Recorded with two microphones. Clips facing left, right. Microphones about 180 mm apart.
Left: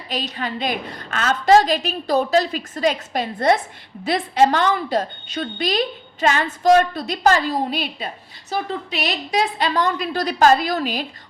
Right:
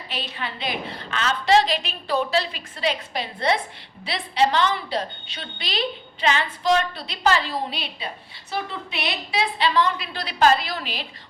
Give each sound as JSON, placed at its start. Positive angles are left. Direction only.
{"t": 0.1, "sound": "a woman's voice", "side_deg": 40}